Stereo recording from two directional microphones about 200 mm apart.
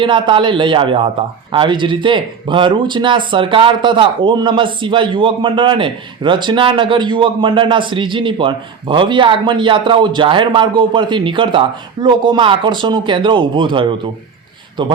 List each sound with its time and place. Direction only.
0.0 s speech: 25° right (ahead or behind)